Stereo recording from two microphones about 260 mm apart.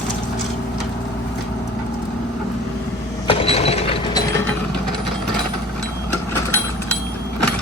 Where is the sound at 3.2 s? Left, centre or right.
Left.